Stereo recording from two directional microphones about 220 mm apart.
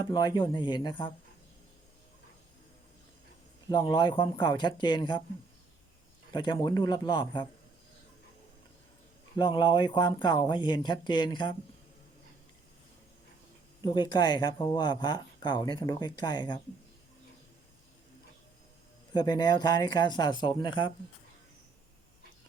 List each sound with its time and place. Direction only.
0.0 s speech: 20° left (ahead or behind)
3.7 s speech: 20° left (ahead or behind)
6.3 s speech: 20° left (ahead or behind)
9.4 s speech: 20° left (ahead or behind)
13.8 s speech: 20° left (ahead or behind)
19.1 s speech: 20° left (ahead or behind)